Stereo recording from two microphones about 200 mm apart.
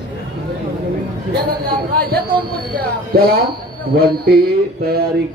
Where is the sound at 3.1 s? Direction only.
50° right (ahead or behind).